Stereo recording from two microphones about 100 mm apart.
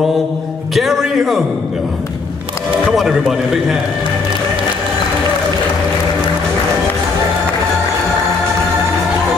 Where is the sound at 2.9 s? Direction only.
Centre (ahead or behind).